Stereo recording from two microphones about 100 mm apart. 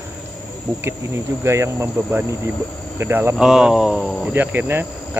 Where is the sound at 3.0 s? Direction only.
25° right (ahead or behind).